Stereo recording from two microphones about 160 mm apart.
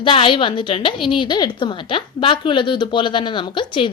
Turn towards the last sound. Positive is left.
turn(degrees=30)  # may be behind; listen again after turning